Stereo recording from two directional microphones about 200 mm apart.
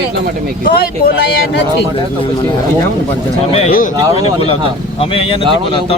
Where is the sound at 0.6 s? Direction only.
50° left (ahead or behind).